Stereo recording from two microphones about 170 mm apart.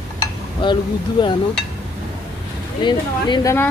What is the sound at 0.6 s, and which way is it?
Speech, 25° left (ahead or behind).